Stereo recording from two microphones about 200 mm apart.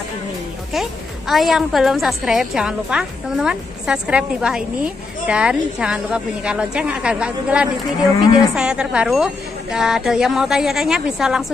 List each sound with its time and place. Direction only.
0.7 s a woman's voice: centre (ahead or behind)